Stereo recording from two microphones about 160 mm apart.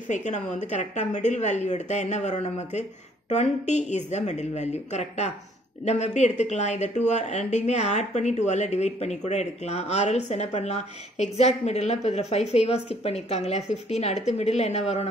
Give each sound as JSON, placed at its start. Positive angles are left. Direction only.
{"t": 0.1, "sound": "speech", "side_deg": 50}